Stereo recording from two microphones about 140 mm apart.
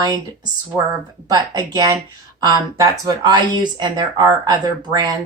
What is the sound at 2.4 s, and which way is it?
Speech, 30° right (ahead or behind).